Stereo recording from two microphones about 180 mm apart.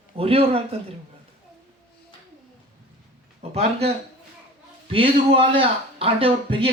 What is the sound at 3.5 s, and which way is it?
Speech, 35° right (ahead or behind).